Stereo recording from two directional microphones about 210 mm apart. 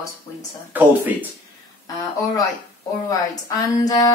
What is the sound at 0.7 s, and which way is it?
Speech, 10° right (ahead or behind).